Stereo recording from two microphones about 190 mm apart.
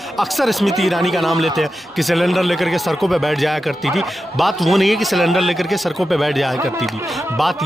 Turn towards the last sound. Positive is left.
turn(degrees=0)  # may be behind; listen again after turning